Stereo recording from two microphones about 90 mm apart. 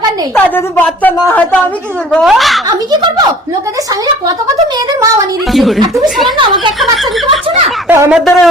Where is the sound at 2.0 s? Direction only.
5° left (ahead or behind).